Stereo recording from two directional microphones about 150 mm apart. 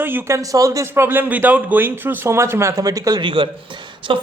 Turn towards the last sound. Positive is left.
turn(degrees=-35)  # may be behind; listen again after turning